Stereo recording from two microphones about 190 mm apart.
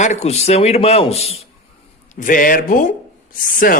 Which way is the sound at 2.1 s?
45° left (ahead or behind).